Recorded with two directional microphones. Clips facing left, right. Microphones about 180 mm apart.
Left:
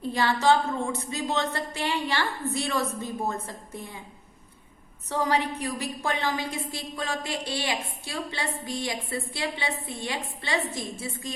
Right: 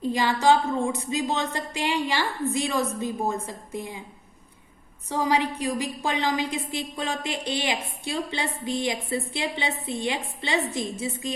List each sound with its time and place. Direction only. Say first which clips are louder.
0.0 s a woman's voice: right 2 dB; 15° right (ahead or behind)
5.0 s a woman's voice: right 2 dB; 10° right (ahead or behind)